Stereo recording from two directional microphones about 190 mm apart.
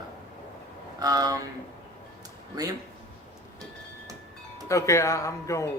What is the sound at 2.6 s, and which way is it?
Speech, 20° right (ahead or behind).